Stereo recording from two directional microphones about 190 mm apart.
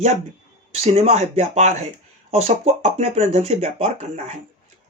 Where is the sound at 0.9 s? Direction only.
35° right (ahead or behind).